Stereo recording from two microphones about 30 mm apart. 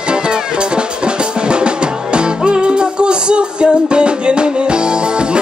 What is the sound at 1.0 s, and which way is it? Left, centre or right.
Drum, right.